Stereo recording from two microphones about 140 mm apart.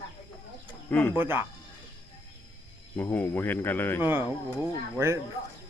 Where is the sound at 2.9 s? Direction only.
15° left (ahead or behind).